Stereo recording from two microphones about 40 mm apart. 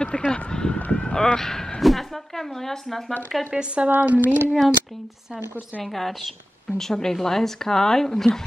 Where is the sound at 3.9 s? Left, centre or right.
Right.